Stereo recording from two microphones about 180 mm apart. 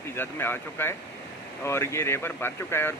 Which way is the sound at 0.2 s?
10° left (ahead or behind).